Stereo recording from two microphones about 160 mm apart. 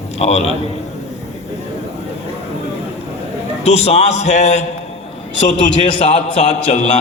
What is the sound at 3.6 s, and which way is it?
A man's voice, 40° left (ahead or behind).